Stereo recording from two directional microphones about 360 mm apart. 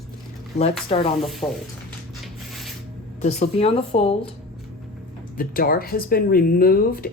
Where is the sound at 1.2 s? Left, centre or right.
Centre.